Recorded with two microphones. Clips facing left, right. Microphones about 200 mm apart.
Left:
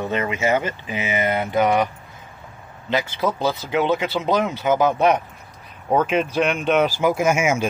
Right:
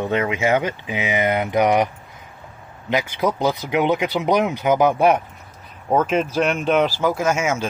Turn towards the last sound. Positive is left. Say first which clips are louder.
# left 2 dB
turn(degrees=10)  # may be behind; listen again after turning